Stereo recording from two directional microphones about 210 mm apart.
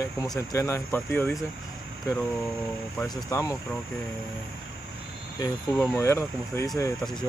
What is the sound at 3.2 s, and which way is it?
Speech, 15° left (ahead or behind).